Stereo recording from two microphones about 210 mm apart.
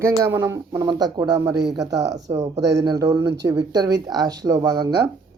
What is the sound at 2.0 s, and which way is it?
Speech, 55° right (ahead or behind).